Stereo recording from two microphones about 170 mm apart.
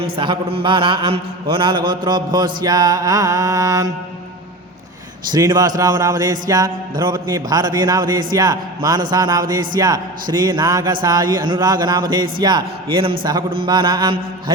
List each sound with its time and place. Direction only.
0.0 s music: 30° right (ahead or behind)
5.3 s music: 25° right (ahead or behind)